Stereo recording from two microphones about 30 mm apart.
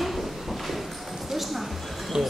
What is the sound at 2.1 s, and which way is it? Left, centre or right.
Speech, centre.